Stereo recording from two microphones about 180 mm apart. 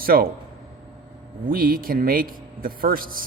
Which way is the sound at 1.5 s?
55° right (ahead or behind).